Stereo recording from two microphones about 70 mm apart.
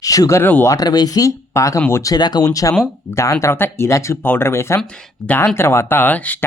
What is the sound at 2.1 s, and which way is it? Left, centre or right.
Speech, left.